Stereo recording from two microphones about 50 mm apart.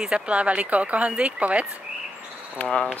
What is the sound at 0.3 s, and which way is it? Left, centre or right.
Speech, right.